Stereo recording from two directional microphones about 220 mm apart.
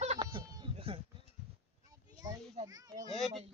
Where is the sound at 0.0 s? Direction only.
25° right (ahead or behind).